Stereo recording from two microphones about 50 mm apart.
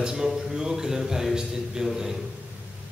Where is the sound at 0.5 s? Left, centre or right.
Centre.